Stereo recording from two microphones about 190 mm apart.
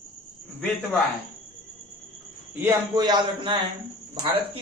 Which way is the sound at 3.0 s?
25° right (ahead or behind).